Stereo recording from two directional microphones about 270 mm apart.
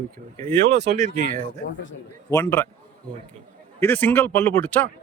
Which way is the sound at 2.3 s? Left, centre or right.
Centre.